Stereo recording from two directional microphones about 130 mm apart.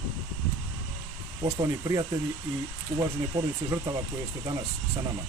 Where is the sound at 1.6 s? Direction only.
25° right (ahead or behind).